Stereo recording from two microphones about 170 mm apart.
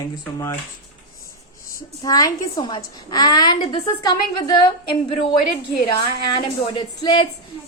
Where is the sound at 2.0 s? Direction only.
20° left (ahead or behind).